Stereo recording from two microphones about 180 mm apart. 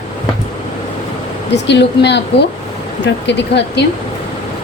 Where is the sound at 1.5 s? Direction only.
70° left (ahead or behind).